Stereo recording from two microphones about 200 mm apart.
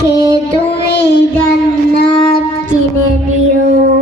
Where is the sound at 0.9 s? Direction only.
55° left (ahead or behind).